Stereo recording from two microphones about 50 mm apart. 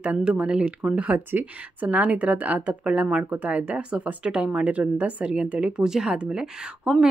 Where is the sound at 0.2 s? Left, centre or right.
Centre.